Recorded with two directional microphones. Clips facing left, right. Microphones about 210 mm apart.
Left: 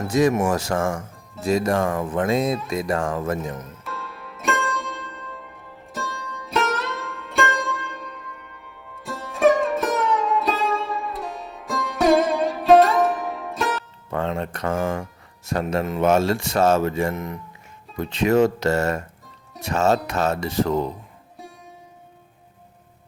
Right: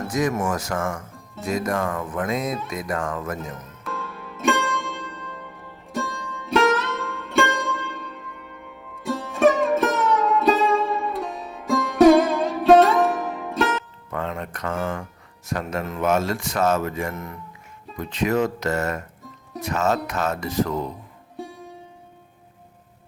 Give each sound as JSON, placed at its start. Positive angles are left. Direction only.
{"t": 0.1, "sound": "speech", "side_deg": 30}
{"t": 3.8, "sound": "music", "side_deg": 0}
{"t": 14.1, "sound": "music", "side_deg": 30}
{"t": 15.4, "sound": "speech", "side_deg": 30}
{"t": 21.4, "sound": "music", "side_deg": 0}